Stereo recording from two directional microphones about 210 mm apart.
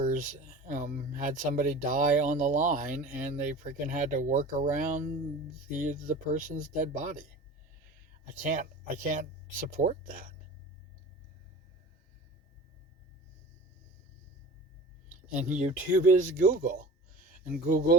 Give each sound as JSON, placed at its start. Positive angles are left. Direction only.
{"t": 0.0, "sound": "speech", "side_deg": -40}
{"t": 8.4, "sound": "speech", "side_deg": -40}
{"t": 15.3, "sound": "speech", "side_deg": -35}